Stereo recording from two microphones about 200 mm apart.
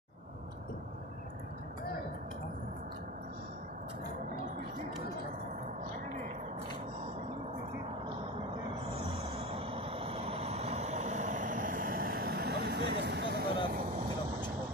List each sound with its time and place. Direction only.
9.5 s vehicle: 25° right (ahead or behind); by 13.5 s 55° right (ahead or behind)